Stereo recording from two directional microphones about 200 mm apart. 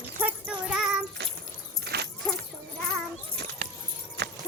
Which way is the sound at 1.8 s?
55° right (ahead or behind).